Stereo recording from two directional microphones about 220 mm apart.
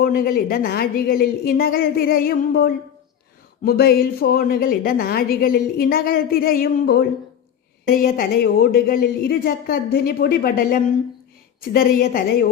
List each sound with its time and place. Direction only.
0.0 s a woman's voice: 45° left (ahead or behind)